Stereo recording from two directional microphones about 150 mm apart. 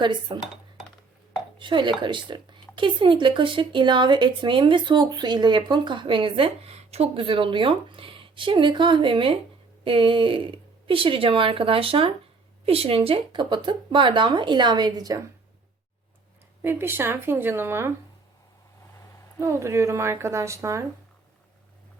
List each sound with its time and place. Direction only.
0.0 s speech: 30° right (ahead or behind)
1.5 s speech: 30° right (ahead or behind)
16.6 s speech: 15° right (ahead or behind)
19.4 s a woman's voice: 20° right (ahead or behind)